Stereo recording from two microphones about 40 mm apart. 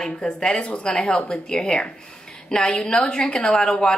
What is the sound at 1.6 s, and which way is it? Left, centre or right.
A woman's voice, centre.